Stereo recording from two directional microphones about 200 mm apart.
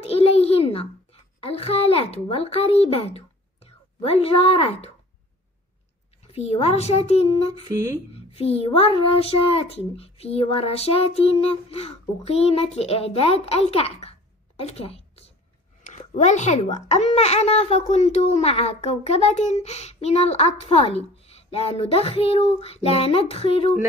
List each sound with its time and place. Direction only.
0.0 s a sound: 30° left (ahead or behind)
6.3 s speech: 30° left (ahead or behind)
7.6 s speech: 15° right (ahead or behind)
8.1 s speech: 30° left (ahead or behind)
14.6 s a sound: 30° left (ahead or behind)
16.7 s speech: 35° left (ahead or behind)